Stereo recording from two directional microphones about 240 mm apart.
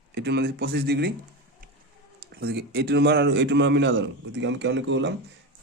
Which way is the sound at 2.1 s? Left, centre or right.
Right.